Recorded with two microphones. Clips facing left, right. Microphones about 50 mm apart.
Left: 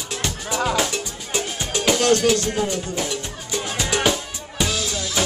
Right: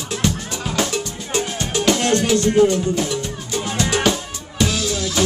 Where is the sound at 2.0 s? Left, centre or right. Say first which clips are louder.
Left 1 dB; right.